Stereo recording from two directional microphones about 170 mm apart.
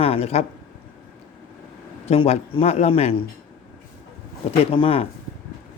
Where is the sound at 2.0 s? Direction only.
40° left (ahead or behind).